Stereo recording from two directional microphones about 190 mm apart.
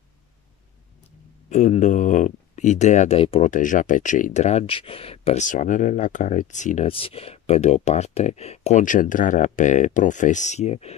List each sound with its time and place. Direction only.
1.5 s speech: 40° left (ahead or behind)
3.4 s speech: 40° left (ahead or behind)